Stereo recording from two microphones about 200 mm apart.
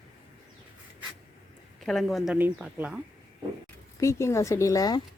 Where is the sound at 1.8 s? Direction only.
Centre (ahead or behind).